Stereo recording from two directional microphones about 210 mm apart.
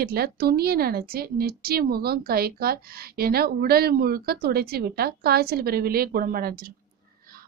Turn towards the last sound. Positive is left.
turn(degrees=-45)  # may be behind; listen again after turning